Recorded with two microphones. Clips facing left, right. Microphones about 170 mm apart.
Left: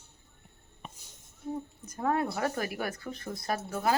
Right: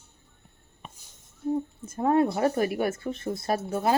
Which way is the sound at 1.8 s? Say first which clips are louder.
Right 7 dB; 25° right (ahead or behind).